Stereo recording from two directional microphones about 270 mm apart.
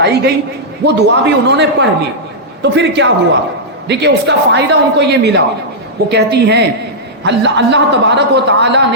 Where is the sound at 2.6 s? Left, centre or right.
Right.